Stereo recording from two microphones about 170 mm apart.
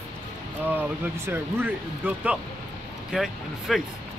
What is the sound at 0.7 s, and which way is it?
Speech, 15° right (ahead or behind).